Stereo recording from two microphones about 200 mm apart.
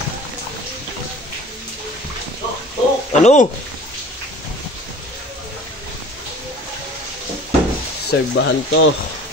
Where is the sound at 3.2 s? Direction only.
35° left (ahead or behind).